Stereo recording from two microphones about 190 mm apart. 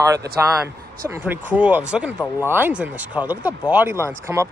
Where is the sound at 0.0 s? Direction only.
20° right (ahead or behind).